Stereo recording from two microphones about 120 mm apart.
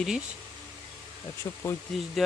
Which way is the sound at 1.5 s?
30° left (ahead or behind).